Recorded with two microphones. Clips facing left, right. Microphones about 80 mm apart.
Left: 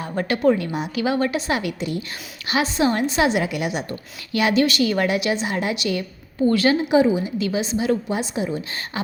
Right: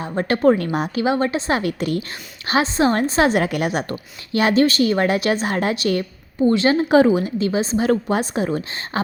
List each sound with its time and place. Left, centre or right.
0.0 s a woman's voice: right
0.3 s a woman's voice: right
0.9 s a woman's voice: right
1.8 s a woman's voice: right
2.5 s a woman's voice: right
4.3 s a woman's voice: right
6.4 s a woman's voice: right
6.7 s speech: right
7.3 s a woman's voice: right